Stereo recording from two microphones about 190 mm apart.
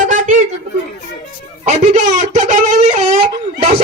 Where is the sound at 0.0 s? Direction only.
40° right (ahead or behind).